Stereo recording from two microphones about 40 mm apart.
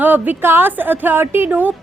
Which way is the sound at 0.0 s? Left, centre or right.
Right.